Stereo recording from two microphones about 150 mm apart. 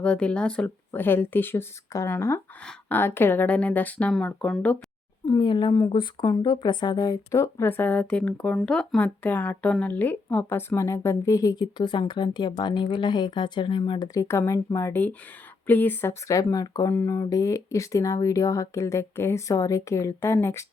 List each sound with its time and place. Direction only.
0.0 s speech: 5° left (ahead or behind)
5.2 s speech: 20° left (ahead or behind)
5.5 s speech: 30° left (ahead or behind)